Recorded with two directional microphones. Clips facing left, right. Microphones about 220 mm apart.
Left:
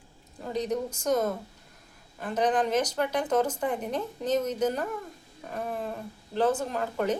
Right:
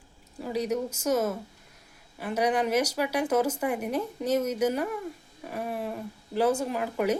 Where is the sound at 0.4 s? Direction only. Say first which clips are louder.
Right 1 dB; 10° right (ahead or behind).